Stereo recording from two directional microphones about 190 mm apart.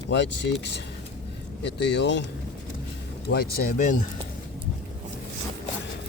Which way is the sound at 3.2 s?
55° left (ahead or behind).